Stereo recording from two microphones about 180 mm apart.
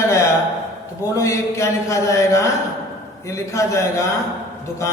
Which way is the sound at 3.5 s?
15° left (ahead or behind).